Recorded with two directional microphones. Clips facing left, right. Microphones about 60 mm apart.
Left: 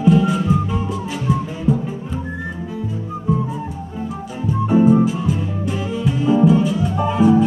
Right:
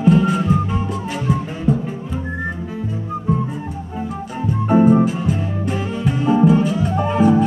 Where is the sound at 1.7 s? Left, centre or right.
Right.